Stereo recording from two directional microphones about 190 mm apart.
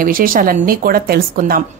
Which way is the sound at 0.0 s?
50° right (ahead or behind).